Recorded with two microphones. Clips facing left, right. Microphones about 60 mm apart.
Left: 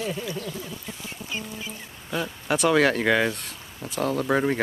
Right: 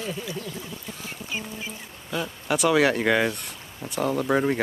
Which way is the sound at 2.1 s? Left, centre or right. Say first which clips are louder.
Even; centre.